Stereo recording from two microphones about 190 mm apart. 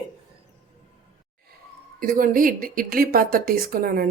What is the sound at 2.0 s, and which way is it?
Speech, 50° right (ahead or behind).